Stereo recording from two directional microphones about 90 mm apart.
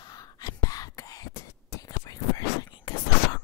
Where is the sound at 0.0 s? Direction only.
45° left (ahead or behind).